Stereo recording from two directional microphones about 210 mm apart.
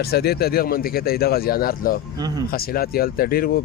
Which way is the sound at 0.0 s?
50° left (ahead or behind).